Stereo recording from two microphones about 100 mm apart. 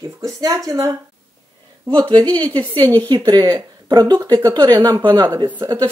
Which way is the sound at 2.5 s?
45° right (ahead or behind).